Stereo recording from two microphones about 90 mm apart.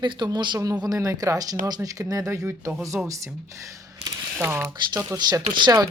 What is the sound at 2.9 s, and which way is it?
Speech, 15° right (ahead or behind).